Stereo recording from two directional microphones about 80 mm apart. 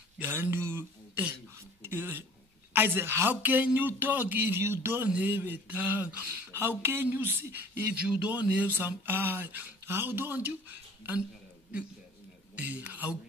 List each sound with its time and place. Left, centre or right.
0.2 s a sound: right
2.7 s speech: right
12.5 s speech: centre